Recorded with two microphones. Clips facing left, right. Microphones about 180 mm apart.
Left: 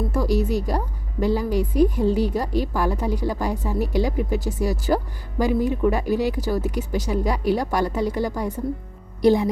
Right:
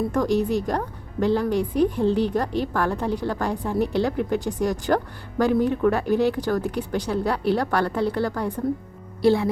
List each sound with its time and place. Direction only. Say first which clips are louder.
0.1 s a woman's voice: right 1 dB; 10° left (ahead or behind)